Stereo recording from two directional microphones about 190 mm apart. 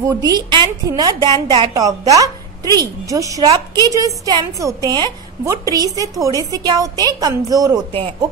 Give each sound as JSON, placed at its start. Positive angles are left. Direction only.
{"t": 0.0, "sound": "a woman's voice", "side_deg": -20}